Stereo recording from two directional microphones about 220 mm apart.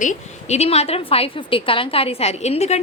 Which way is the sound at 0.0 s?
30° left (ahead or behind).